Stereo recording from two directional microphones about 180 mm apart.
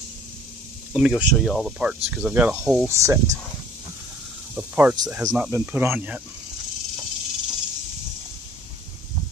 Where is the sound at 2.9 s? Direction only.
15° right (ahead or behind).